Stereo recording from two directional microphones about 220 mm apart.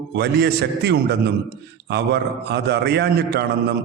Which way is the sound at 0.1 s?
50° right (ahead or behind).